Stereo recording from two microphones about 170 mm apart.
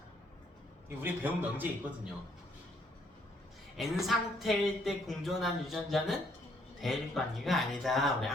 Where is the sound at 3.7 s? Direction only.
Centre (ahead or behind).